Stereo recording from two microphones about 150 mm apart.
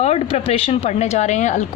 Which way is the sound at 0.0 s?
45° left (ahead or behind).